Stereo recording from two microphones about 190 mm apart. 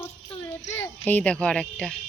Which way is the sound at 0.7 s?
10° left (ahead or behind).